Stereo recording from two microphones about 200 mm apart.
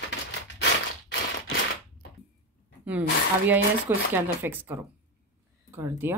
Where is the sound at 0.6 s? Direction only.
60° left (ahead or behind).